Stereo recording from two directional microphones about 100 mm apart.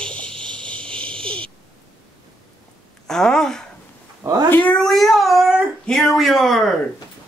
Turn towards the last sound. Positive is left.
turn(degrees=0)  # may be behind; listen again after turning